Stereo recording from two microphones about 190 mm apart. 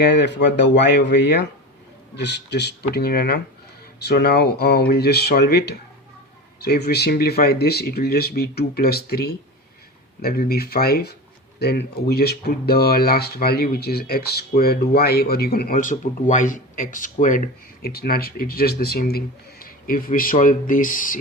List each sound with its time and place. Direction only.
0.0 s speech: 65° left (ahead or behind); by 21.2 s 45° left (ahead or behind)